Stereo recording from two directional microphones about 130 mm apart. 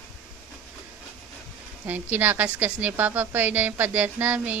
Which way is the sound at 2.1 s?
15° right (ahead or behind).